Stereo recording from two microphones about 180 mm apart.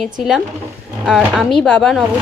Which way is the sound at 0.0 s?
Centre (ahead or behind).